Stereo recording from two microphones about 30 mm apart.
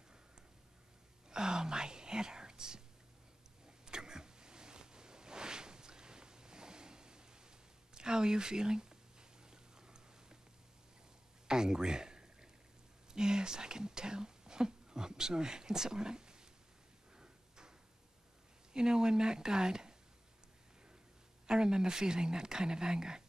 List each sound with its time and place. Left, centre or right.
1.3 s whispering: right
3.6 s a sound: right
11.4 s a sound: right
13.1 s whispering: right
17.2 s tick-tock: right
18.7 s speech: right
21.5 s speech: right